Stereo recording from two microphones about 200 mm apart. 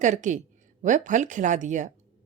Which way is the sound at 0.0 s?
40° right (ahead or behind).